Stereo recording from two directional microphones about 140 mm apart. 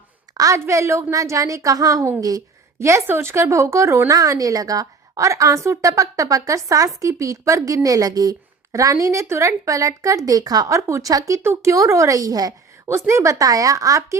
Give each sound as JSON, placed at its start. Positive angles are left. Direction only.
{"t": 0.3, "sound": "speech", "side_deg": -20}